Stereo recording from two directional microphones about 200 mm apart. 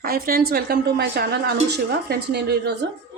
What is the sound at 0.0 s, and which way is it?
A woman's voice, 50° right (ahead or behind).